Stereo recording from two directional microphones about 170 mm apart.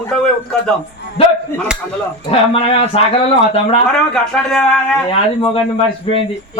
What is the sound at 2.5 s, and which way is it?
Speech, 35° left (ahead or behind).